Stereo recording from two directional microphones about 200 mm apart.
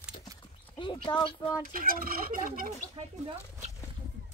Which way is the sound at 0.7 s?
25° left (ahead or behind).